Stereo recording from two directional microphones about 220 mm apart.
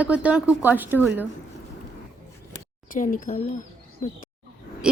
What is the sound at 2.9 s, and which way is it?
Speech, 35° left (ahead or behind).